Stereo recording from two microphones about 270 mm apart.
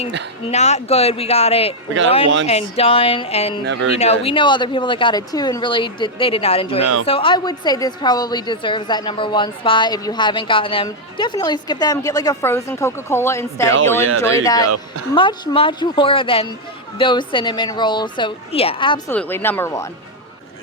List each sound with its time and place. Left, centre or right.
0.4 s a woman's voice: left
3.6 s speech: right
3.9 s a woman's voice: left
19.1 s a woman's voice: centre